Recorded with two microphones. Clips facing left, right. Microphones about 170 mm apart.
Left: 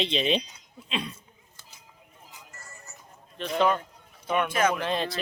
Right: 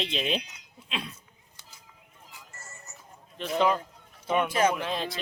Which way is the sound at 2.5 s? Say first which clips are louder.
Even; 25° right (ahead or behind).